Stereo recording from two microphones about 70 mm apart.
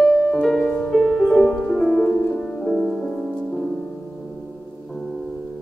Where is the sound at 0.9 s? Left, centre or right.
Centre.